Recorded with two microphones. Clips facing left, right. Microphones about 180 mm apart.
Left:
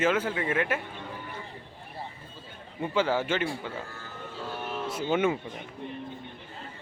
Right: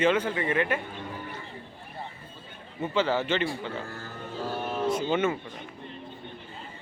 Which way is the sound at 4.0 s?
40° right (ahead or behind).